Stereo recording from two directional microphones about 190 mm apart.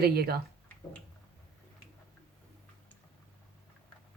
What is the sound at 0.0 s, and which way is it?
Speech, 55° right (ahead or behind).